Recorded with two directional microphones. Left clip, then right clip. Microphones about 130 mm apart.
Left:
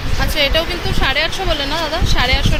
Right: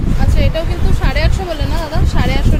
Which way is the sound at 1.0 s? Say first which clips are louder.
Left 4 dB; 15° right (ahead or behind).